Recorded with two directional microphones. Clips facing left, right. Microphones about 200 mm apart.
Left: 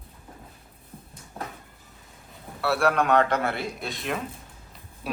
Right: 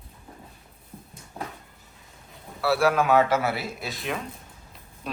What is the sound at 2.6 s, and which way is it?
A man's voice, centre (ahead or behind).